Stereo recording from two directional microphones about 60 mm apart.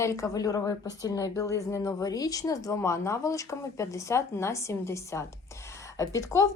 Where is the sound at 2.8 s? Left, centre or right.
Left.